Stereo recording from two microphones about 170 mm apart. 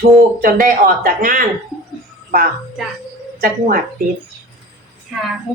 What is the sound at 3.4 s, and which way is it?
Speech, 55° right (ahead or behind).